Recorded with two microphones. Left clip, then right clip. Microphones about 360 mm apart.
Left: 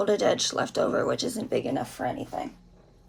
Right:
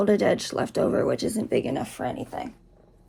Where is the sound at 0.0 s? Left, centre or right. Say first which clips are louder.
Right 1 dB; centre.